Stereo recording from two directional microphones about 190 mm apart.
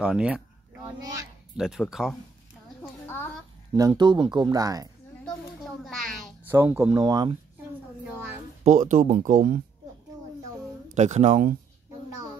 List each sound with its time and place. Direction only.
0.0 s speech: 5° right (ahead or behind)
1.6 s speech: centre (ahead or behind)
2.8 s a sound: 10° left (ahead or behind)
3.7 s speech: 20° right (ahead or behind)
5.9 s a sound: centre (ahead or behind)
6.4 s speech: 10° right (ahead or behind)
8.6 s speech: 40° right (ahead or behind)
11.0 s speech: 40° right (ahead or behind)